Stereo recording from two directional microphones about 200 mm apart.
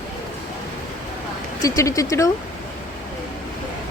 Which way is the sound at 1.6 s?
15° left (ahead or behind).